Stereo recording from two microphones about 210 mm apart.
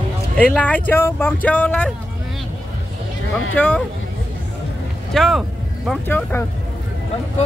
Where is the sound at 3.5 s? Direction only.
5° left (ahead or behind).